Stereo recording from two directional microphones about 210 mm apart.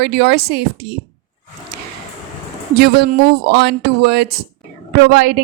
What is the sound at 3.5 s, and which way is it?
Speech, 50° right (ahead or behind).